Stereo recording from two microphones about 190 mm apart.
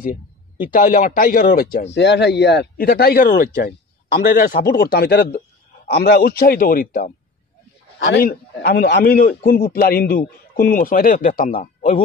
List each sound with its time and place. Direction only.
0.7 s a man's voice: 45° left (ahead or behind)
2.0 s a man's voice: 65° left (ahead or behind); by 7.1 s 45° left (ahead or behind)
8.2 s speech: 55° left (ahead or behind)
8.9 s a man's voice: 50° left (ahead or behind)